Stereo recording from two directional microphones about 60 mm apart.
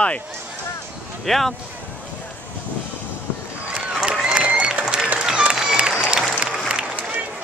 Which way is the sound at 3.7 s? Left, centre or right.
Centre.